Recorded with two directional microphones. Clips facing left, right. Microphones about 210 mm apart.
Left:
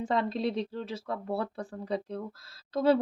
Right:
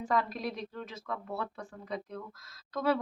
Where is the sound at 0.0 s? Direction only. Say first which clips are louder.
Left 3 dB; 25° left (ahead or behind).